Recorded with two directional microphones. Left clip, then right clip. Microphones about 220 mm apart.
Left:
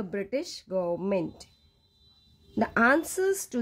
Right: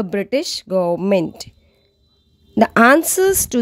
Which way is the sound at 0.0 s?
40° right (ahead or behind).